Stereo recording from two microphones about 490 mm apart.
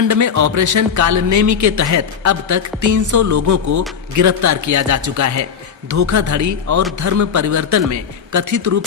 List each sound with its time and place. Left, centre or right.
0.0 s speech: right